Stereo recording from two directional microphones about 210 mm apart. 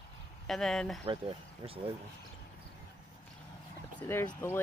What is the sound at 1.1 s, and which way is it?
Speech, 25° right (ahead or behind).